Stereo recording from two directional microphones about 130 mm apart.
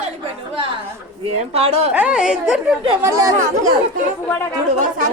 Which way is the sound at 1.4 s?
50° right (ahead or behind).